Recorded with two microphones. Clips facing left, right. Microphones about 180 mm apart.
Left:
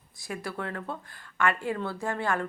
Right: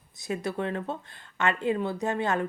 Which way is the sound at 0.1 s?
20° right (ahead or behind).